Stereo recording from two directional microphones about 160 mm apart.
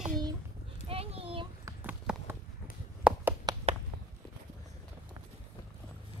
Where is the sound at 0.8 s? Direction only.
35° right (ahead or behind).